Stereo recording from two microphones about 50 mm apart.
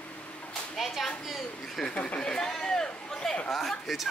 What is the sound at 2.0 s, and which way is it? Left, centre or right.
Speech, left.